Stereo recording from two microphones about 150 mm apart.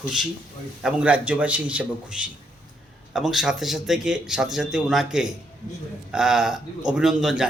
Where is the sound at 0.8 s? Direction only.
5° right (ahead or behind).